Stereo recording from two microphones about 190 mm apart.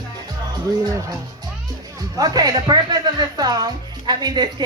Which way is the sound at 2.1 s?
20° right (ahead or behind).